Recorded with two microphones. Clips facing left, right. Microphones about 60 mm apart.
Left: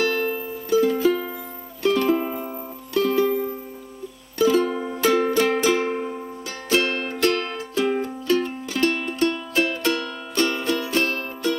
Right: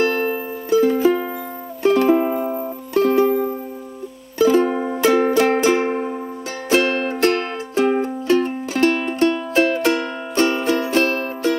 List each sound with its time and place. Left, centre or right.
0.0 s music: right